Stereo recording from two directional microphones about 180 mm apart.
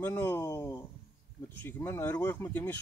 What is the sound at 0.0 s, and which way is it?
Speech, 10° left (ahead or behind).